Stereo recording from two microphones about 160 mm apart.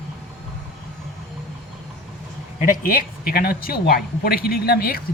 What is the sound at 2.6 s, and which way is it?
Speech, 65° left (ahead or behind).